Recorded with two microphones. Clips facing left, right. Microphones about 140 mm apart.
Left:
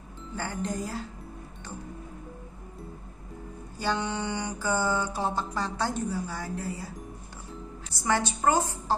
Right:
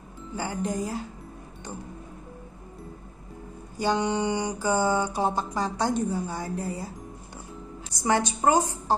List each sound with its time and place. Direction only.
0.4 s mantra: 15° right (ahead or behind)
3.7 s mantra: 15° right (ahead or behind)
7.9 s mantra: 15° right (ahead or behind)